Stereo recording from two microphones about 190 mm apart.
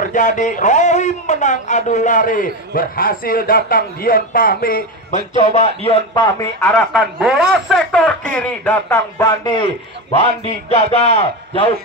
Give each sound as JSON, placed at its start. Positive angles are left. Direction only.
{"t": 0.1, "sound": "a man's voice", "side_deg": 40}
{"t": 5.3, "sound": "a man's voice", "side_deg": 35}
{"t": 6.7, "sound": "speech", "side_deg": 0}
{"t": 10.2, "sound": "a man's voice", "side_deg": 35}